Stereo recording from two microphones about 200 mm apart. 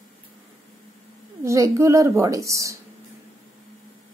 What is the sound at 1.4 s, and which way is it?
A woman's voice, 15° right (ahead or behind).